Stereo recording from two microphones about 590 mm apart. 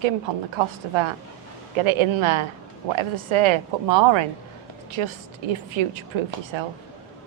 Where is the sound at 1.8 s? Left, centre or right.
Right.